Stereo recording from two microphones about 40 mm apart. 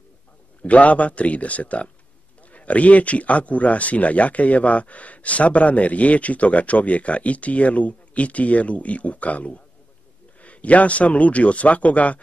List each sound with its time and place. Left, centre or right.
0.6 s speech: left